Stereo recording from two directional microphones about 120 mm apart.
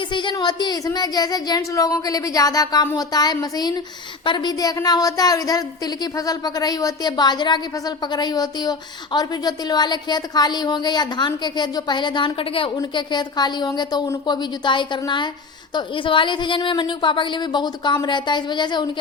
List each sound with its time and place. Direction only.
0.1 s a woman's voice: 40° left (ahead or behind)